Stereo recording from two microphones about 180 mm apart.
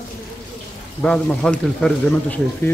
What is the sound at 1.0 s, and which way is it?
Speech, 5° left (ahead or behind).